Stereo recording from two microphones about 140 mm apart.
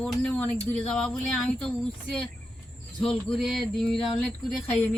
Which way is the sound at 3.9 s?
40° left (ahead or behind).